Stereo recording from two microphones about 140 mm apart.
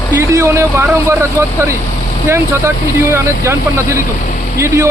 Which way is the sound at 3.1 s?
20° right (ahead or behind).